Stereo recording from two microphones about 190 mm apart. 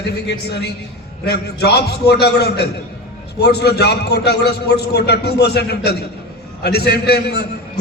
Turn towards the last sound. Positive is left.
turn(degrees=60)  # may be behind; listen again after turning